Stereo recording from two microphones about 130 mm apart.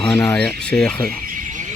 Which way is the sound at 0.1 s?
25° left (ahead or behind).